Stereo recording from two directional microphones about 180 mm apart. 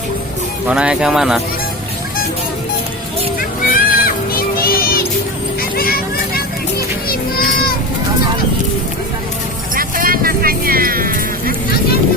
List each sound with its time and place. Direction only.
0.7 s speech: 5° right (ahead or behind)
3.7 s music: 55° left (ahead or behind)
5.7 s vehicle: 55° left (ahead or behind)
7.1 s children playing: 55° left (ahead or behind)
9.7 s music: 50° right (ahead or behind)